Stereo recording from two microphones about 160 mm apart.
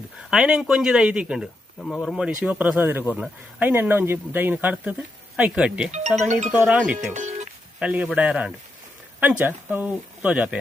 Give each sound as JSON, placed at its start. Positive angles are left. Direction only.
{"t": 0.3, "sound": "speech", "side_deg": -5}
{"t": 5.9, "sound": "speech", "side_deg": -45}
{"t": 6.5, "sound": "speech", "side_deg": -10}
{"t": 7.1, "sound": "speech", "side_deg": -45}
{"t": 7.8, "sound": "speech", "side_deg": -5}